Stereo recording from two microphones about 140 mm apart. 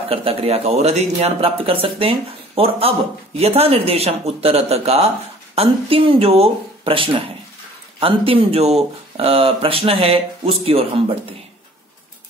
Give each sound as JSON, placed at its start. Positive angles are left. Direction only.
{"t": 0.1, "sound": "speech", "side_deg": -45}